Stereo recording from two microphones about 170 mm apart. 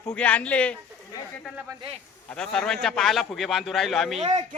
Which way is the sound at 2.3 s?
5° left (ahead or behind).